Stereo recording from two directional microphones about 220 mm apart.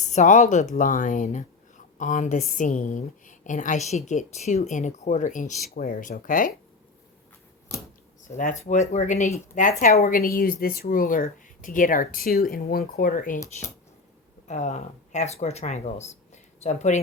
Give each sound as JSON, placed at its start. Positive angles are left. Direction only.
{"t": 0.0, "sound": "a woman's voice", "side_deg": 35}
{"t": 7.7, "sound": "a sound", "side_deg": 15}
{"t": 8.4, "sound": "a woman's voice", "side_deg": 35}
{"t": 9.8, "sound": "a woman's voice", "side_deg": 40}
{"t": 14.4, "sound": "speech", "side_deg": 30}